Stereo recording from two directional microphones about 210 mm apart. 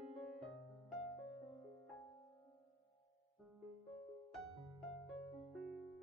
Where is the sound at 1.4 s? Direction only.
30° left (ahead or behind).